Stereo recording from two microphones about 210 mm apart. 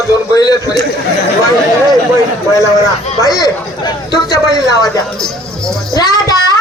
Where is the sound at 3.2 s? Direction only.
15° left (ahead or behind).